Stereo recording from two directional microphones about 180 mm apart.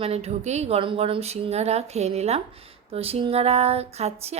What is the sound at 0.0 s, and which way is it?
A woman's voice, 35° right (ahead or behind).